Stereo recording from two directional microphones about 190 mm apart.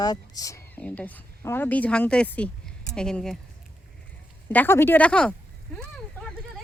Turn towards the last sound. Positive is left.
turn(degrees=5)  # may be behind; listen again after turning